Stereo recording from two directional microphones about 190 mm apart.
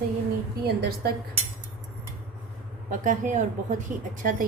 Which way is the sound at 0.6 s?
55° right (ahead or behind).